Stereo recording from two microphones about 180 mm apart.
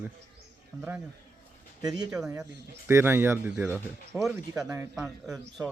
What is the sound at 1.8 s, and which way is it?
Speech, 20° right (ahead or behind).